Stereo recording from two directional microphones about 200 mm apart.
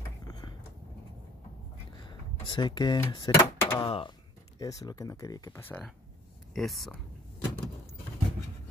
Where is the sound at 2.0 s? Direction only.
25° left (ahead or behind); by 6.9 s centre (ahead or behind).